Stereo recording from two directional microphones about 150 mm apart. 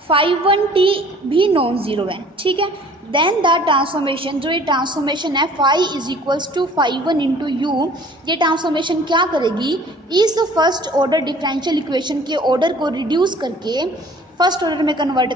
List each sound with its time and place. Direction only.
0.1 s a woman's voice: 35° right (ahead or behind)